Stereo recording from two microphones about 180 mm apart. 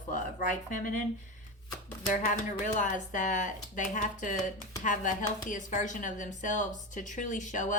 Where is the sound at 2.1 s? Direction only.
45° left (ahead or behind).